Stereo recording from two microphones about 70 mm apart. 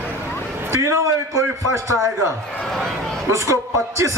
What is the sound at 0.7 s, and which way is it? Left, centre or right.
A man's voice, right.